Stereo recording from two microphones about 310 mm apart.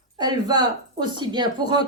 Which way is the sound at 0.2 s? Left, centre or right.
Centre.